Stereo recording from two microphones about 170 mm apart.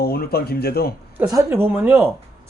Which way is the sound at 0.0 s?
65° left (ahead or behind).